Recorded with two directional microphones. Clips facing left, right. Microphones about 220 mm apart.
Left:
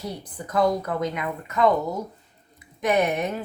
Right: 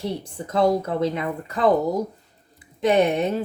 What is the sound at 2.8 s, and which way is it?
Speech, 30° right (ahead or behind).